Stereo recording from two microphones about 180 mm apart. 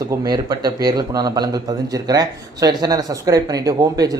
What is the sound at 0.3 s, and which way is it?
Speech, 20° right (ahead or behind).